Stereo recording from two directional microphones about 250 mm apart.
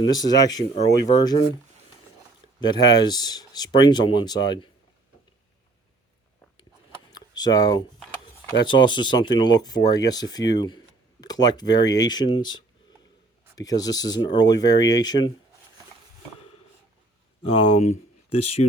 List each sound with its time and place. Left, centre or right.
0.0 s speech: centre
2.6 s speech: centre
7.1 s a sound: centre
8.4 s speech: centre
17.4 s speech: left
17.8 s speech: left